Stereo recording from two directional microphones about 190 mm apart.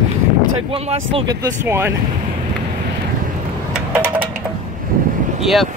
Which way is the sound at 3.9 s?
10° right (ahead or behind).